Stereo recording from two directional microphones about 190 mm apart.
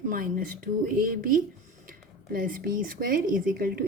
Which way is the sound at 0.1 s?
45° right (ahead or behind).